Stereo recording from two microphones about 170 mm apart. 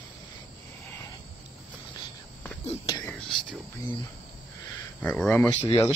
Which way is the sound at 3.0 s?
5° left (ahead or behind).